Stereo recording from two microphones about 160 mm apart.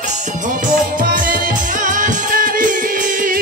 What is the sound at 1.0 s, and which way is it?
Music, 60° right (ahead or behind).